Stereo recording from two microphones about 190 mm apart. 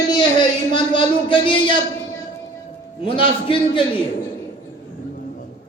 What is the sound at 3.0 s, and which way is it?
Speech, 25° left (ahead or behind).